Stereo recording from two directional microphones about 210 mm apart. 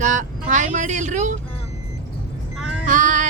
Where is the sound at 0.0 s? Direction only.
35° right (ahead or behind).